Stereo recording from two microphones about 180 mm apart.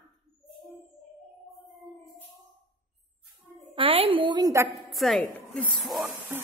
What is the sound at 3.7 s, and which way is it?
Speech, 30° right (ahead or behind).